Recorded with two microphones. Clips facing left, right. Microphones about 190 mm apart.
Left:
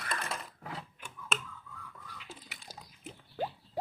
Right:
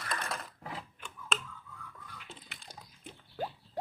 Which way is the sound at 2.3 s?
5° left (ahead or behind).